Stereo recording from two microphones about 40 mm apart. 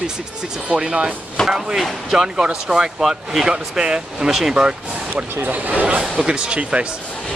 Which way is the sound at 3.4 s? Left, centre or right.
Centre.